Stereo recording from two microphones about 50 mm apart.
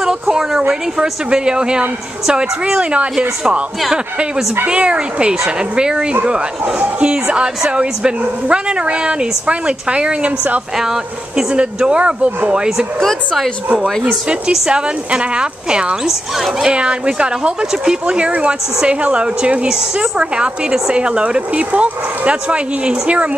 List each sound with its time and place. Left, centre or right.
0.0 s speech: centre
4.6 s speech: right
10.8 s speech: centre
11.5 s speech: right
14.7 s speech: centre
16.1 s speech: centre
16.7 s speech: right